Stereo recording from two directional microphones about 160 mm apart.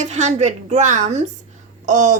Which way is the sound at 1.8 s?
50° right (ahead or behind).